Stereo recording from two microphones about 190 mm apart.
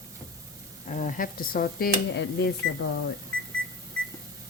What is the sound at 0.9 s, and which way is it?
Speech, 45° left (ahead or behind).